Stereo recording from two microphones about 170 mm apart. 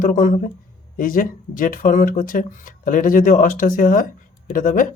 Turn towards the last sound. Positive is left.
turn(degrees=50)  # may be behind; listen again after turning